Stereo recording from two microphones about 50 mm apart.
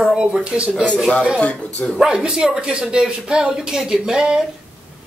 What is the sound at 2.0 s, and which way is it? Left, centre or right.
Speech, centre.